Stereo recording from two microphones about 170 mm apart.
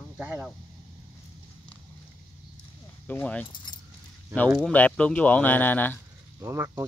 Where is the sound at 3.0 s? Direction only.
10° left (ahead or behind).